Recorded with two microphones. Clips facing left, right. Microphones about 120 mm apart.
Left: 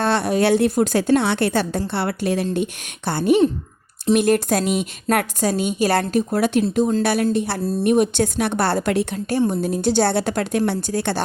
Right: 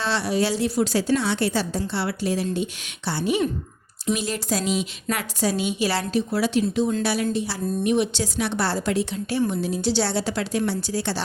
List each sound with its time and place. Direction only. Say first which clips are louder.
0.0 s a woman's voice: left 5 dB; 50° left (ahead or behind)